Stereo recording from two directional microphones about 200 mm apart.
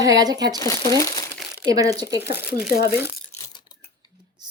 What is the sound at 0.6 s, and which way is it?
Speech, 15° left (ahead or behind).